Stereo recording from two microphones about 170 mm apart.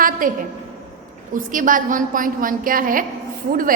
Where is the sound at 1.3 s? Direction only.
50° right (ahead or behind).